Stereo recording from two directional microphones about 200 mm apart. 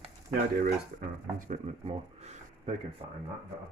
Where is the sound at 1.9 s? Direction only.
30° right (ahead or behind).